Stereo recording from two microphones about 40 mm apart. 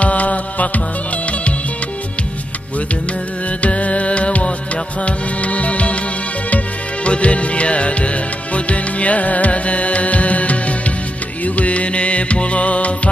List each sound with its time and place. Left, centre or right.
0.0 s music: left
3.6 s music: left
7.1 s music: left